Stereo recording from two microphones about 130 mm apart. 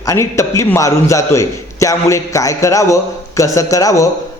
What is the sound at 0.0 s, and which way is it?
A man's voice, 25° left (ahead or behind).